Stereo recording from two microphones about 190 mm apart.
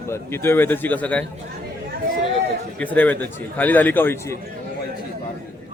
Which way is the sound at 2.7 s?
10° left (ahead or behind).